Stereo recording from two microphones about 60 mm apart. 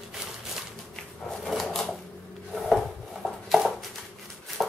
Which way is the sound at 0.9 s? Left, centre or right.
Centre.